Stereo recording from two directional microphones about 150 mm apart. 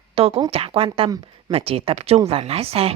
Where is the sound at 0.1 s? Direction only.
40° right (ahead or behind).